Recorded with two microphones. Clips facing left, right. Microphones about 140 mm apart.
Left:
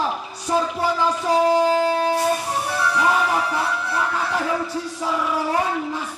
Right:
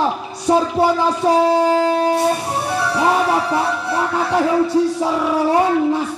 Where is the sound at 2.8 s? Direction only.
35° right (ahead or behind).